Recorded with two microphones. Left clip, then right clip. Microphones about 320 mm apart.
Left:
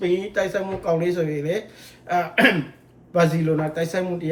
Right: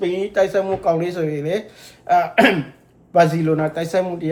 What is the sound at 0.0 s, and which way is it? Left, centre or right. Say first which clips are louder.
Speech: right 4 dB; centre.